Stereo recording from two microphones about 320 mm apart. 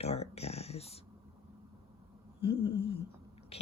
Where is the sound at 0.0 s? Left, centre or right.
Centre.